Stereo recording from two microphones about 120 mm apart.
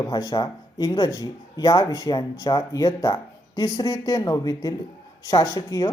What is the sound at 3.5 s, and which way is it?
Speech, 35° left (ahead or behind).